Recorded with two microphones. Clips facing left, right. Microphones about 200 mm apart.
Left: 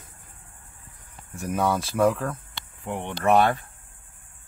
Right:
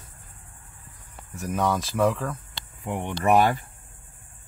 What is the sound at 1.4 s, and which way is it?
Speech, 5° left (ahead or behind).